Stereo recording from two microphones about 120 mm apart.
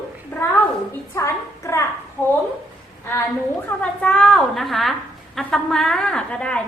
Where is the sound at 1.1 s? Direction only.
25° left (ahead or behind).